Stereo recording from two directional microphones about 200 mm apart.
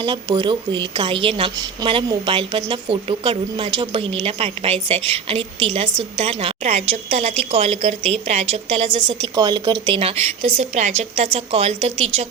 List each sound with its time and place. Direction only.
0.0 s a woman's voice: 20° right (ahead or behind)